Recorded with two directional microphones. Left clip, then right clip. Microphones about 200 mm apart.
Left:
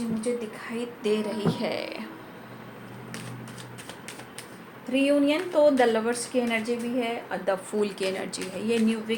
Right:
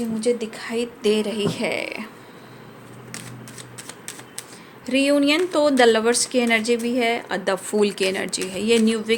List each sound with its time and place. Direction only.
0.2 s speech: 55° right (ahead or behind)
4.9 s speech: 55° right (ahead or behind)